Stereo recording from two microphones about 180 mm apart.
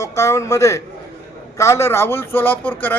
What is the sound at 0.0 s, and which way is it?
A man's voice, 15° left (ahead or behind).